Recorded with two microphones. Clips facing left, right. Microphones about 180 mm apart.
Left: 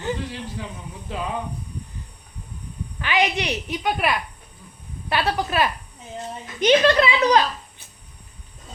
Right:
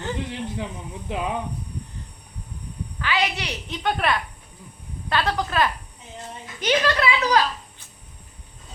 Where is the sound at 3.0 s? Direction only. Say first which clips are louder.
Left 3 dB; 15° left (ahead or behind).